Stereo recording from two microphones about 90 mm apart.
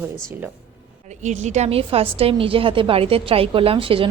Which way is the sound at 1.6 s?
90° right.